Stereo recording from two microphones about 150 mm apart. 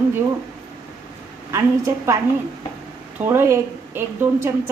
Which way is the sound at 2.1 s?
15° right (ahead or behind).